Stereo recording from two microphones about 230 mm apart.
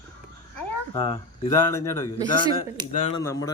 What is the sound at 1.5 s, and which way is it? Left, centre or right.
Speech, centre.